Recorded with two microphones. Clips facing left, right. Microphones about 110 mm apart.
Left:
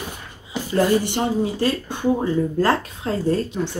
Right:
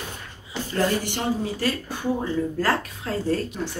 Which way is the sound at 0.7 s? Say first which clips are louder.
Left 6 dB; 20° left (ahead or behind).